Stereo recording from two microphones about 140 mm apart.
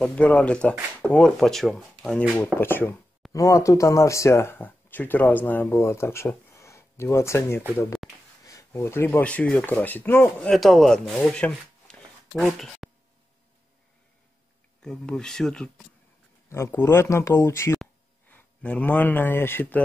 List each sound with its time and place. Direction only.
0.0 s speech: 10° left (ahead or behind)
10.5 s speech: centre (ahead or behind)
14.8 s speech: 5° left (ahead or behind)
16.4 s speech: 20° left (ahead or behind)
18.3 s a man's voice: 10° left (ahead or behind)